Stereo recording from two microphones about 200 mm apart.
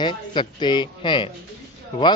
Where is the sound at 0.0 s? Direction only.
20° left (ahead or behind).